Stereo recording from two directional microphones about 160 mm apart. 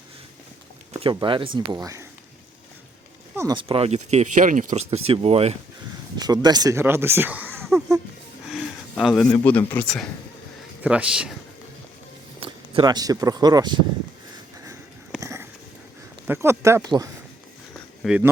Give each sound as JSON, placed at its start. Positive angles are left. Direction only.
{"t": 1.1, "sound": "speech", "side_deg": -30}
{"t": 3.3, "sound": "speech", "side_deg": -25}
{"t": 6.1, "sound": "speech", "side_deg": -25}
{"t": 8.4, "sound": "a sound", "side_deg": 0}
{"t": 9.4, "sound": "speech", "side_deg": 10}
{"t": 10.8, "sound": "speech", "side_deg": -5}
{"t": 12.4, "sound": "speech", "side_deg": -30}
{"t": 15.2, "sound": "a sound", "side_deg": -15}
{"t": 16.2, "sound": "speech", "side_deg": -15}
{"t": 18.0, "sound": "speech", "side_deg": 0}